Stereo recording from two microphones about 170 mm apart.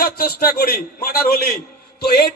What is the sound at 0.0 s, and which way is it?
A man's voice, 60° left (ahead or behind).